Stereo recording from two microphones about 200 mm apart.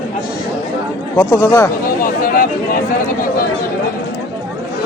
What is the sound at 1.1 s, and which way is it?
Speech, 10° left (ahead or behind).